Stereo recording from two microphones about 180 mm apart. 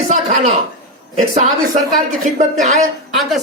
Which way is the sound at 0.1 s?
40° right (ahead or behind).